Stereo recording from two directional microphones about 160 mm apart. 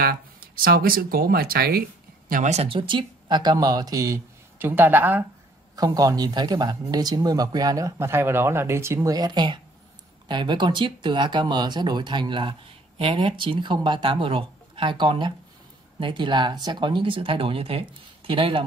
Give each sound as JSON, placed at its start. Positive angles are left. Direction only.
{"t": 0.0, "sound": "speech", "side_deg": -70}
{"t": 2.5, "sound": "speech", "side_deg": -35}
{"t": 5.8, "sound": "speech", "side_deg": -25}